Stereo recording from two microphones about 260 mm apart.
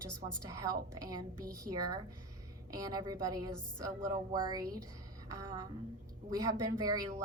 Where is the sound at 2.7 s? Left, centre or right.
Centre.